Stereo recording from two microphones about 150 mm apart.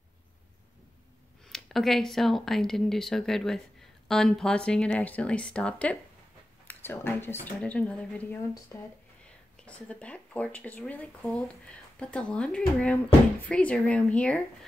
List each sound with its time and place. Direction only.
1.5 s speech: centre (ahead or behind)